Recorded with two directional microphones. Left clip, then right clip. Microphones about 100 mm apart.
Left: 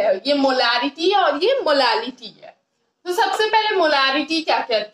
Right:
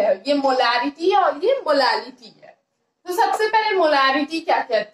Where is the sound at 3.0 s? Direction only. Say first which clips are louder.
Even; 30° left (ahead or behind).